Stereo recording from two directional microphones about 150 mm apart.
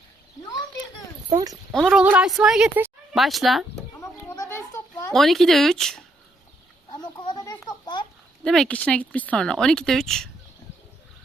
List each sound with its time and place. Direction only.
1.3 s speech: 25° right (ahead or behind)
1.7 s speech: centre (ahead or behind)
4.0 s children playing: 15° left (ahead or behind)
5.1 s speech: centre (ahead or behind)
6.9 s a sound: 30° left (ahead or behind)
8.4 s speech: 5° left (ahead or behind)